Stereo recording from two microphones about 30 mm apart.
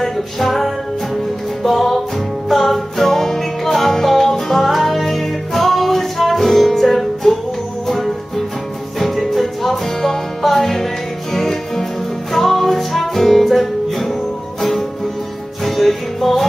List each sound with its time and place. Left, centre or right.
0.0 s music: centre